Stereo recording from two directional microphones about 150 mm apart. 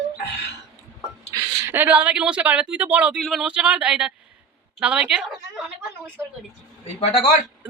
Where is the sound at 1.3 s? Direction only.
25° right (ahead or behind).